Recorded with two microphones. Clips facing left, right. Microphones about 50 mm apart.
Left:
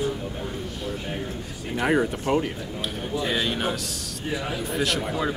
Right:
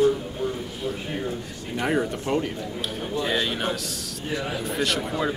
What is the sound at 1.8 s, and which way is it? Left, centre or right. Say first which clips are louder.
A man's voice: left 2 dB; centre.